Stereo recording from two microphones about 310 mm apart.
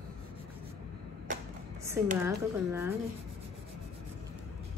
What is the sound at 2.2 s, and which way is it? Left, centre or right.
Speech, centre.